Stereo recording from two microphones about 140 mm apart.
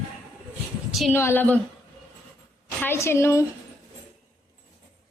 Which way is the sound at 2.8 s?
20° left (ahead or behind).